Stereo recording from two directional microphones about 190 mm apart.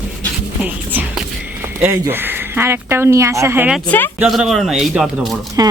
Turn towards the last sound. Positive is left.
turn(degrees=-20)  # may be behind; listen again after turning